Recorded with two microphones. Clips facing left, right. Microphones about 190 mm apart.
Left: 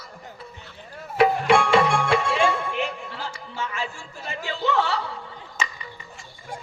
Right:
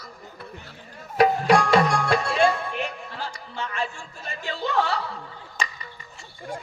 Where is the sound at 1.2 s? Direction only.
40° right (ahead or behind).